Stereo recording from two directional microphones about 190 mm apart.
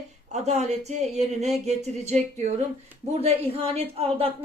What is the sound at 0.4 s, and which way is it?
Speech, 35° right (ahead or behind).